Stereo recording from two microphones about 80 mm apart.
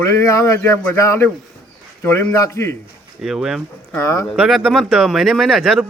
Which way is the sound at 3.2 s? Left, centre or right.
Centre.